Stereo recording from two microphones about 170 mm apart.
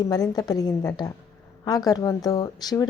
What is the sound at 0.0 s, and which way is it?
A woman's voice, 20° left (ahead or behind).